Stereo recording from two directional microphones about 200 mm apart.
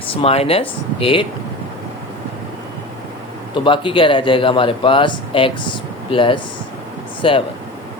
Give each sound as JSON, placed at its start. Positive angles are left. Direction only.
{"t": 0.2, "sound": "a man's voice", "side_deg": 30}
{"t": 3.5, "sound": "a man's voice", "side_deg": 25}